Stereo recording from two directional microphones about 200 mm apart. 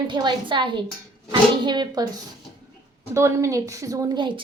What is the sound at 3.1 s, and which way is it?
A woman's voice, 15° right (ahead or behind).